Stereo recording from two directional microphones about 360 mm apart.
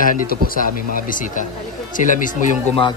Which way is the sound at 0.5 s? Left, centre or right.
Left.